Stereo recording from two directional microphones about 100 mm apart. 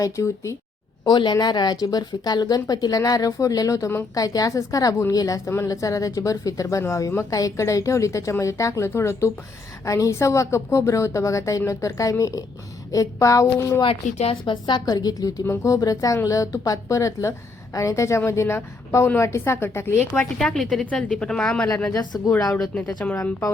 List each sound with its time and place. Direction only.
0.0 s a woman's voice: 30° left (ahead or behind)
1.0 s a woman's voice: 45° left (ahead or behind)
13.8 s speech: 80° left
14.4 s a woman's voice: 55° left (ahead or behind)
14.8 s a woman's voice: 40° left (ahead or behind); by 20.2 s 25° left (ahead or behind)
20.4 s a woman's voice: 5° left (ahead or behind)
22.7 s a woman's voice: 10° left (ahead or behind)